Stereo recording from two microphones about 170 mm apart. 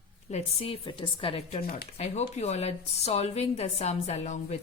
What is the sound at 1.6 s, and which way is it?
Speech, 60° left (ahead or behind).